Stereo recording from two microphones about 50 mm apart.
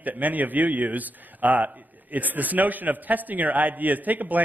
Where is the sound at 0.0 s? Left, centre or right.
Right.